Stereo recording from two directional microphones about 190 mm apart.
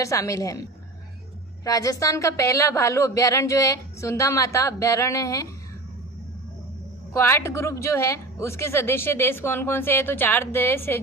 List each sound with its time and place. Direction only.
0.0 s a woman's voice: 15° left (ahead or behind)
1.6 s a woman's voice: 20° left (ahead or behind)
7.1 s a woman's voice: 15° left (ahead or behind)